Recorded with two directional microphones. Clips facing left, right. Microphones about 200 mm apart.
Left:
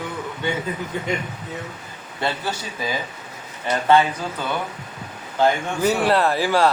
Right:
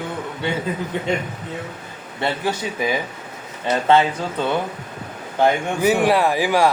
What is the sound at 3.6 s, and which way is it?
A man's voice, 20° right (ahead or behind).